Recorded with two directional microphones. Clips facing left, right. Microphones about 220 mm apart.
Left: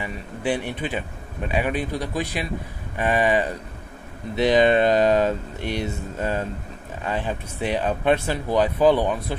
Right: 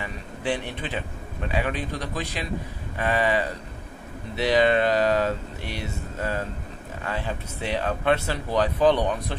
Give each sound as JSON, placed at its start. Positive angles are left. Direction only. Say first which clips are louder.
{"t": 0.0, "sound": "speech", "louder": "left 3 dB", "side_deg": 15}